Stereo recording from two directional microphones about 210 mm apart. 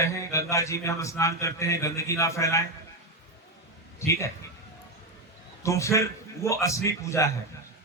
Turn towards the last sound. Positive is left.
turn(degrees=15)  # may be behind; listen again after turning